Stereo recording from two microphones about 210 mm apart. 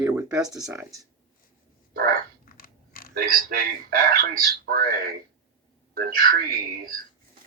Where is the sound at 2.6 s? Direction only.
45° left (ahead or behind).